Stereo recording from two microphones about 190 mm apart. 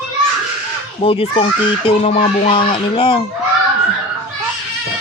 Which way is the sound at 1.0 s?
30° left (ahead or behind).